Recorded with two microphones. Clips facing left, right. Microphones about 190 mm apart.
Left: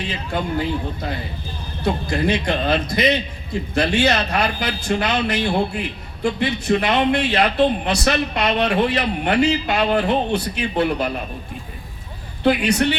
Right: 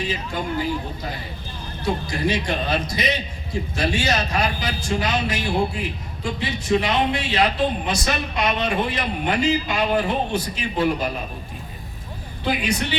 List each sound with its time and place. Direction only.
0.1 s a man's voice: 60° left (ahead or behind)
12.4 s a man's voice: 65° left (ahead or behind)